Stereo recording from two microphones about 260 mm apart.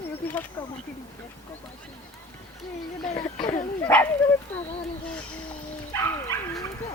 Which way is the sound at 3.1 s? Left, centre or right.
Centre.